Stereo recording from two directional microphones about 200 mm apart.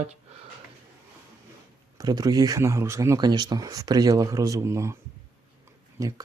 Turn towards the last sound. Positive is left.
turn(degrees=-15)  # may be behind; listen again after turning